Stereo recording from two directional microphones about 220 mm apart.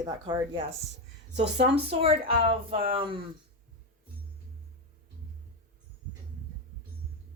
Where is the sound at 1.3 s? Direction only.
50° right (ahead or behind).